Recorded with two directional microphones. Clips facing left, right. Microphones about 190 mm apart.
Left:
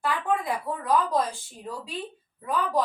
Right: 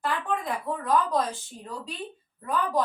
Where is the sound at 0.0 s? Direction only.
10° left (ahead or behind).